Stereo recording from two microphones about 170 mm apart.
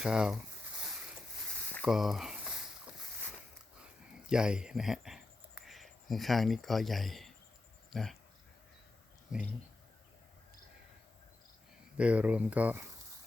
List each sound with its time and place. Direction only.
0.0 s speech: 5° right (ahead or behind)
1.8 s a sound: centre (ahead or behind)
4.3 s speech: 5° right (ahead or behind)
9.3 s speech: 5° right (ahead or behind)
11.9 s speech: 10° right (ahead or behind)